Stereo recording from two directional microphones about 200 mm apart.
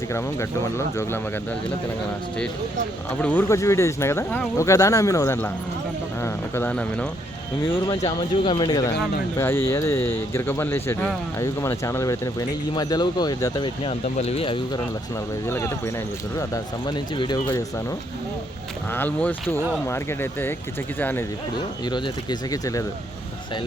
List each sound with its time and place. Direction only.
0.1 s speech: 15° left (ahead or behind)
3.2 s speech: 10° left (ahead or behind)
7.9 s speech: 20° left (ahead or behind)
15.4 s speech: 10° left (ahead or behind)
17.2 s speech: 20° left (ahead or behind)
18.9 s speech: 10° left (ahead or behind)
21.8 s speech: 20° left (ahead or behind)